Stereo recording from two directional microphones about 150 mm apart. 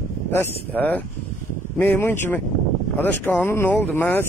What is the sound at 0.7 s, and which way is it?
Speech, 10° left (ahead or behind).